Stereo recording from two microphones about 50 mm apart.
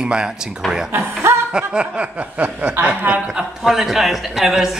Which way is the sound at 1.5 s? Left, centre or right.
Centre.